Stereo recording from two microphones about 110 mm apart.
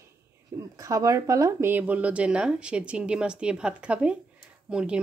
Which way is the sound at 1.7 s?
15° right (ahead or behind).